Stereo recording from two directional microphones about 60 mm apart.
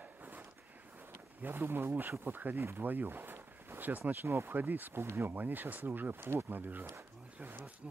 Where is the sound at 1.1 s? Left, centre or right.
Right.